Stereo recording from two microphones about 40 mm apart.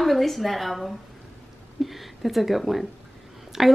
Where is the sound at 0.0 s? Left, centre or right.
Centre.